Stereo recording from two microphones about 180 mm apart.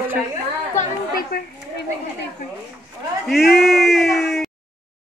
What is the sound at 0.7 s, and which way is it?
Chatter, 55° left (ahead or behind).